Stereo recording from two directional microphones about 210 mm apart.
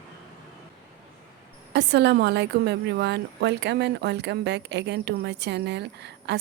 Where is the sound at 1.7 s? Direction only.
55° right (ahead or behind).